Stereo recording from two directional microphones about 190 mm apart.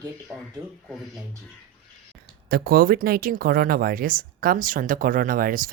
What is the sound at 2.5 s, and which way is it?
Speech, 55° right (ahead or behind).